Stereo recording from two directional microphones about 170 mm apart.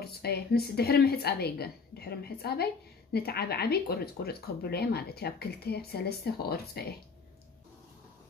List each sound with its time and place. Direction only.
0.0 s a woman's voice: 70° left (ahead or behind)